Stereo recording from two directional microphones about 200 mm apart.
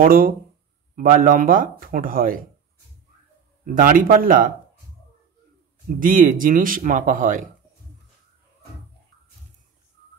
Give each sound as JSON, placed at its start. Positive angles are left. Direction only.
{"t": 0.0, "sound": "speech", "side_deg": -45}
{"t": 3.6, "sound": "speech", "side_deg": -45}
{"t": 5.9, "sound": "speech", "side_deg": -45}